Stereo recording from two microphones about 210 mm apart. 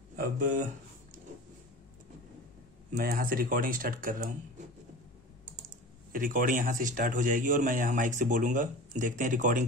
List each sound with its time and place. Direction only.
0.1 s speech: 40° right (ahead or behind)
2.9 s speech: 45° right (ahead or behind)
6.1 s speech: 40° right (ahead or behind)